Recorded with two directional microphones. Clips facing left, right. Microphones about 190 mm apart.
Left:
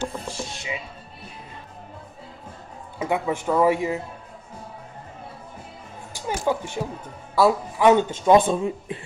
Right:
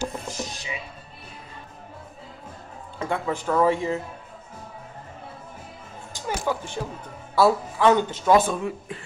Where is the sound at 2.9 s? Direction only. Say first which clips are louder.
Left 3 dB; 10° left (ahead or behind).